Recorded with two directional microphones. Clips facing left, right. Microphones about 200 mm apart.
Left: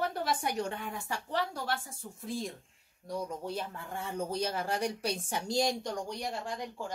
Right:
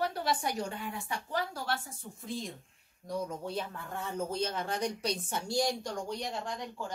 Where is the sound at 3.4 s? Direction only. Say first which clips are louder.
Even; 10° left (ahead or behind).